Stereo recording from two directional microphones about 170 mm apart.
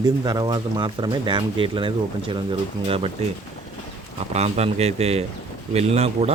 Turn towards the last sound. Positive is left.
turn(degrees=-40)  # may be behind; listen again after turning